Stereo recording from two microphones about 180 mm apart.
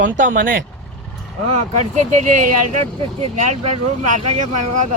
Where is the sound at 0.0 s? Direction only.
50° right (ahead or behind).